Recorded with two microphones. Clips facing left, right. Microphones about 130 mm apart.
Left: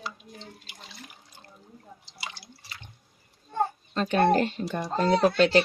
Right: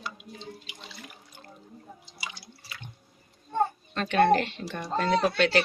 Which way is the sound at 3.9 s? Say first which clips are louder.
Even; 35° left (ahead or behind).